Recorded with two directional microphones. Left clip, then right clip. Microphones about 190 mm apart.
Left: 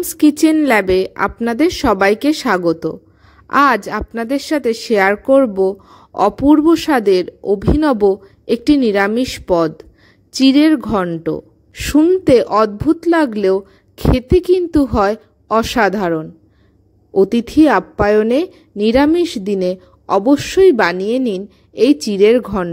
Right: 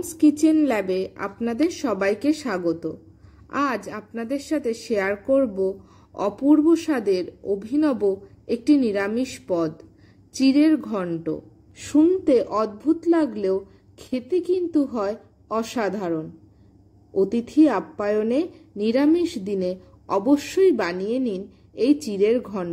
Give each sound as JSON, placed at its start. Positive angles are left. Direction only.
{"t": 0.2, "sound": "a woman's voice", "side_deg": 50}